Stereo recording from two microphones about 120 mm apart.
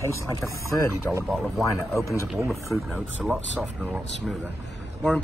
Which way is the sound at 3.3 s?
10° right (ahead or behind).